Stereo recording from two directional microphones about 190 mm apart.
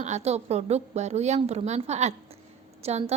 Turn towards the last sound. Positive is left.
turn(degrees=-35)  # may be behind; listen again after turning